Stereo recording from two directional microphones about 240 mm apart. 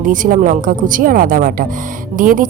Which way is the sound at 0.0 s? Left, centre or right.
Right.